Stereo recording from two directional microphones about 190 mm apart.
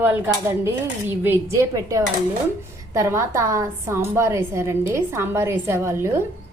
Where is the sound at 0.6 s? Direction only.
10° right (ahead or behind).